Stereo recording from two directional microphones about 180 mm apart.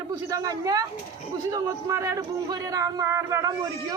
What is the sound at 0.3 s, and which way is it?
Speech, 20° right (ahead or behind).